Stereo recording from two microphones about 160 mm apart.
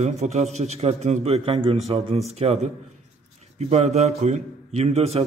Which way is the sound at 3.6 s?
40° right (ahead or behind).